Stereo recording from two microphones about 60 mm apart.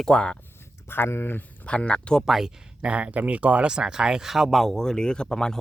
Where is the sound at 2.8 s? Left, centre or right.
Right.